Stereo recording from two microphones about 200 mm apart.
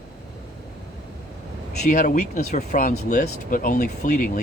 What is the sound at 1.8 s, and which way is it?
Speech, 45° left (ahead or behind).